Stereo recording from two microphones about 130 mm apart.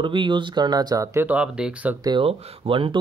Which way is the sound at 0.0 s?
40° right (ahead or behind).